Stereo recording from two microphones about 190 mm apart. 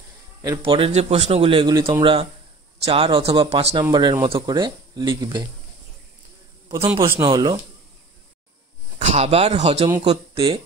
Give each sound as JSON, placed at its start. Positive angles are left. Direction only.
{"t": 0.4, "sound": "a man's voice", "side_deg": -20}
{"t": 7.1, "sound": "a man's voice", "side_deg": -20}
{"t": 8.9, "sound": "speech", "side_deg": -35}